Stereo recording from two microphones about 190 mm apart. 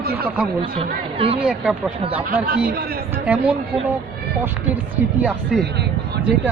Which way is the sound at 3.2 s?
10° right (ahead or behind).